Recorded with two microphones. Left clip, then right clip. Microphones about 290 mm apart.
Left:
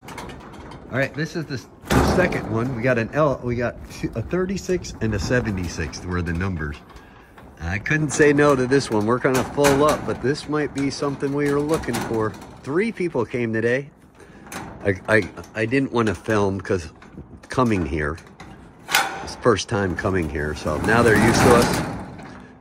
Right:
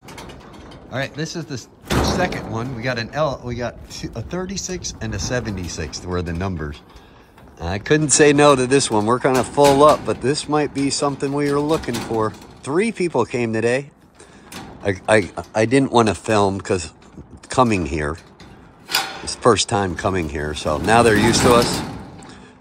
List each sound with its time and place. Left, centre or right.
0.1 s speech: centre
15.3 s speech: centre
19.2 s speech: centre